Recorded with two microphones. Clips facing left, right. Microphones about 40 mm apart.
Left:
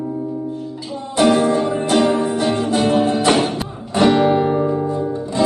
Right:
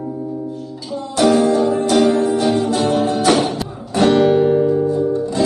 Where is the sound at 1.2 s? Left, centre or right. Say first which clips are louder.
Right 1 dB; left.